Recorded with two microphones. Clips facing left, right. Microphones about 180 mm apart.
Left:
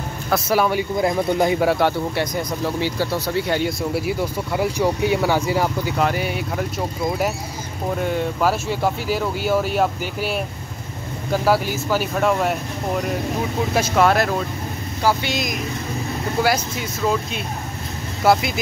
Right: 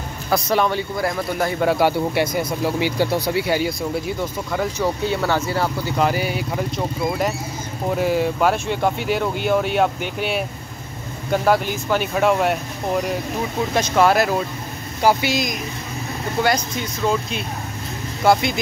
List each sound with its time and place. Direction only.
0.3 s speech: 5° left (ahead or behind)
1.6 s speech: centre (ahead or behind)
1.9 s speech: 10° right (ahead or behind)
3.9 s speech: 5° left (ahead or behind)
5.9 s speech: centre (ahead or behind)
13.7 s speech: 5° left (ahead or behind)